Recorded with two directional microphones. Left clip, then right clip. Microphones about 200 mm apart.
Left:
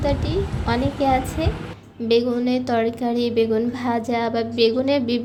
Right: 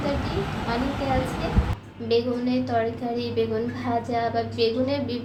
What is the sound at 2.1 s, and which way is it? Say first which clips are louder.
A woman's voice: left 4 dB; 50° left (ahead or behind).